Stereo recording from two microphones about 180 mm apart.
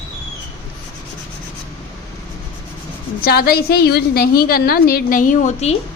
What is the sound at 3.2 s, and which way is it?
A woman's voice, 60° left (ahead or behind).